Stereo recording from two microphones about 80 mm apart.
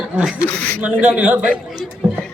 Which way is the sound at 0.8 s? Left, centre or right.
Centre.